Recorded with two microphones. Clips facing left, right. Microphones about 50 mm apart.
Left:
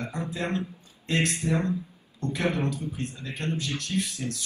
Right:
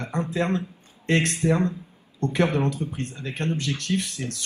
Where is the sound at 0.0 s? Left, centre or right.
Right.